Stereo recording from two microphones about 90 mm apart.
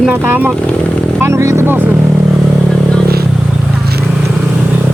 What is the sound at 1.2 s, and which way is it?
Speech, 35° right (ahead or behind).